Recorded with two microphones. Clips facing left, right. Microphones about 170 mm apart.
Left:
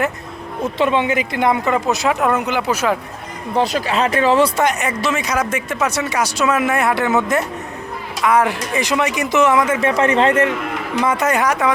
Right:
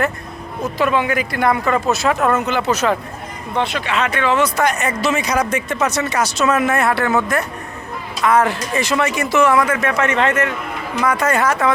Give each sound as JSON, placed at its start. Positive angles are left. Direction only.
{"t": 0.6, "sound": "speech", "side_deg": 25}
{"t": 3.5, "sound": "speech", "side_deg": 40}
{"t": 5.0, "sound": "speech", "side_deg": 0}
{"t": 8.2, "sound": "speech", "side_deg": 10}